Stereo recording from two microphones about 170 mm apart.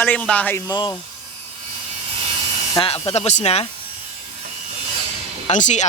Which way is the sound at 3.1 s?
40° left (ahead or behind).